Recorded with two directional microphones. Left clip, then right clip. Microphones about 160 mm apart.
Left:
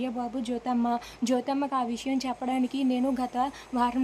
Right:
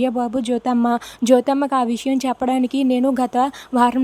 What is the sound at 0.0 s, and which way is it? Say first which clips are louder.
Speech: right 12 dB; 45° right (ahead or behind).